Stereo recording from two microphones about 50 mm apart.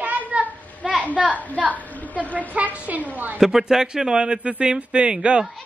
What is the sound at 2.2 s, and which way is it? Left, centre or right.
Speech, right.